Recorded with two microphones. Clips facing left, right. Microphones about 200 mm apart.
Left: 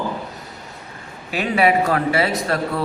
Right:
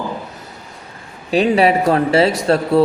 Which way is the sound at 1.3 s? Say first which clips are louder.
Right 5 dB; 30° right (ahead or behind).